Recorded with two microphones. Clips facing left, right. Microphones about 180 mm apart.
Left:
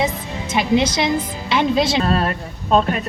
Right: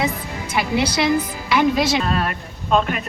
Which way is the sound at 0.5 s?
20° left (ahead or behind).